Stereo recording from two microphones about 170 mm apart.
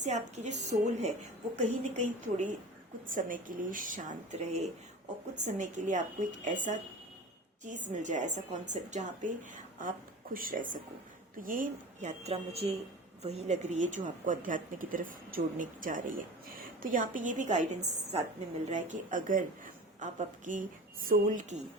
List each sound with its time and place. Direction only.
0.0 s a woman's voice: 45° right (ahead or behind)
3.1 s a woman's voice: 50° right (ahead or behind)